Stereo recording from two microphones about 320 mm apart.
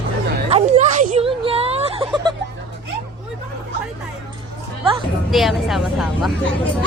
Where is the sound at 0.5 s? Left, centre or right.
Right.